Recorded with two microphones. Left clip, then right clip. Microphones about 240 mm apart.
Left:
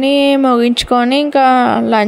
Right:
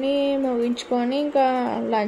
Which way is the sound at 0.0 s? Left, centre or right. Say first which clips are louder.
Left 11 dB; left.